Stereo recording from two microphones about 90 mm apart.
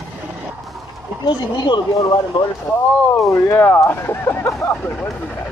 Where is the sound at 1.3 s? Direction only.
55° left (ahead or behind).